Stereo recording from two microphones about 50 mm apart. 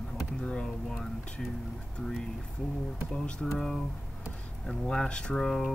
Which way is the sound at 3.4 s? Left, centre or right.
Centre.